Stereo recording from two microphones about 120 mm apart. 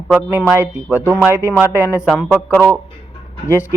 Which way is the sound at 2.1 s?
10° left (ahead or behind).